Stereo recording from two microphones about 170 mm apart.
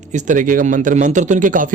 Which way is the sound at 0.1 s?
45° right (ahead or behind).